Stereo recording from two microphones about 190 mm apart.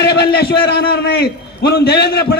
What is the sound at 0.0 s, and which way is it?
A man's voice, 60° left (ahead or behind).